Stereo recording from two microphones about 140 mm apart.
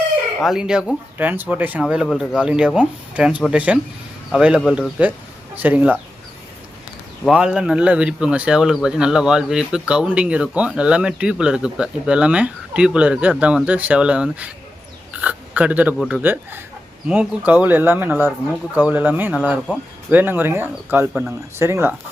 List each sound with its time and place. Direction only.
0.4 s speech: 5° right (ahead or behind)
7.3 s speech: 5° right (ahead or behind)